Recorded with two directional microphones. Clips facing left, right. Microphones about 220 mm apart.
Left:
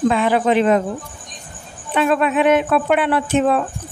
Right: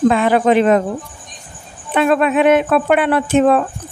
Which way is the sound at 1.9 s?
55° right (ahead or behind).